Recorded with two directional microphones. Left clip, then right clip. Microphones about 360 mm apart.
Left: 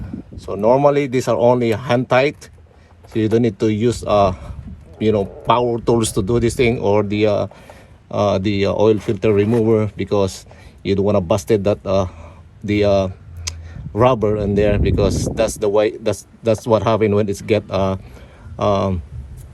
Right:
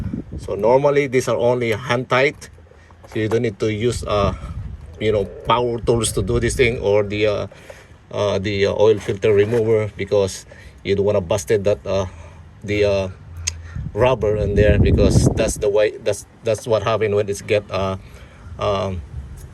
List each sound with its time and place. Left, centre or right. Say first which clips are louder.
0.4 s speech: left 2 dB; centre